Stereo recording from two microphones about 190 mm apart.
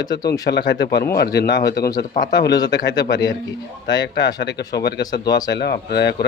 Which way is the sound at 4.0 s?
70° left (ahead or behind).